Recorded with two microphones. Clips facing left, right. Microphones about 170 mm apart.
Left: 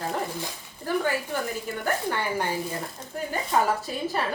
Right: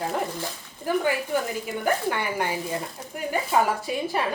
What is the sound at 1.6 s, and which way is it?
A woman's voice, 10° right (ahead or behind).